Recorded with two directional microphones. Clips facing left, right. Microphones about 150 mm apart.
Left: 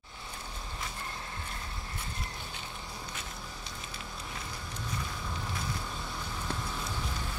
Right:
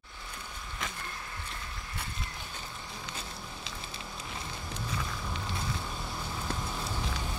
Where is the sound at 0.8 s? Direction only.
90° right.